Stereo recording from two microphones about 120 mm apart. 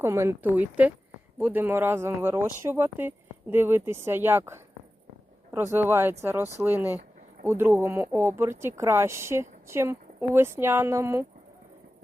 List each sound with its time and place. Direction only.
0.0 s speech: 20° right (ahead or behind)